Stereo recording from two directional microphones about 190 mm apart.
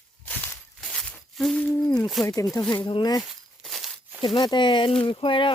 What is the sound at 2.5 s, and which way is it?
Speech, 15° left (ahead or behind).